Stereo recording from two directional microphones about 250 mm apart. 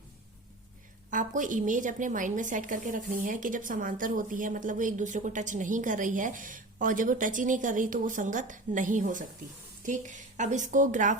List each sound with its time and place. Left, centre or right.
1.1 s a woman's voice: right